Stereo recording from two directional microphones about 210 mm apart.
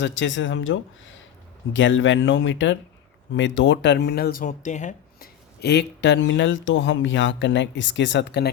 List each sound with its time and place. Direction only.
0.0 s speech: 60° left (ahead or behind); by 5.3 s 35° left (ahead or behind)
5.5 s speech: 55° left (ahead or behind)